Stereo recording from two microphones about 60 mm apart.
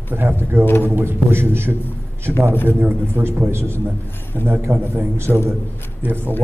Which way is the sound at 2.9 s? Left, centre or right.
Right.